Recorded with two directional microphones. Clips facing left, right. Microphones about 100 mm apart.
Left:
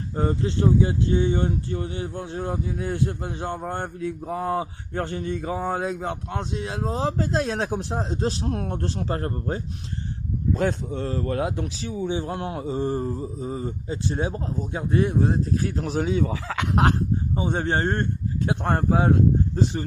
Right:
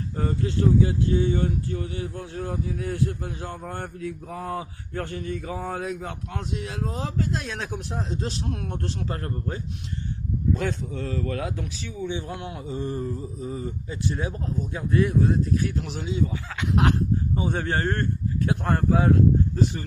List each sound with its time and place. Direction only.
0.2 s speech: 25° left (ahead or behind)
16.0 s speech: 80° left
16.7 s speech: 40° left (ahead or behind)
17.3 s speech: 25° left (ahead or behind)